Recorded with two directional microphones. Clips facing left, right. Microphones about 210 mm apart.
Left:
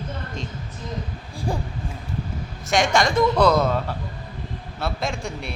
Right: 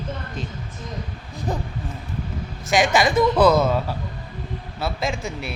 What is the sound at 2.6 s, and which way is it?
A man's voice, 5° right (ahead or behind).